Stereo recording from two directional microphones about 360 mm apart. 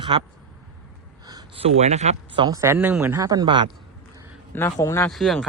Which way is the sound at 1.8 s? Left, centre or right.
Centre.